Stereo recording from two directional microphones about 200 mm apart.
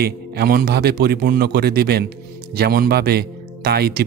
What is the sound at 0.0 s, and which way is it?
A man's voice, 50° right (ahead or behind).